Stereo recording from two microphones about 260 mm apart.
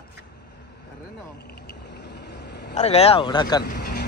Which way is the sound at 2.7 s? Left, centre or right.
Left.